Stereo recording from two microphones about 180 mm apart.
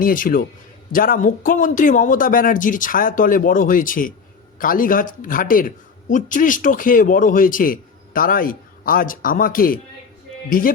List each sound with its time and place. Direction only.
0.0 s a man's voice: 50° left (ahead or behind)